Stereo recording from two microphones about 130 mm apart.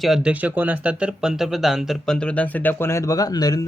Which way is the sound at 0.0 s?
5° right (ahead or behind).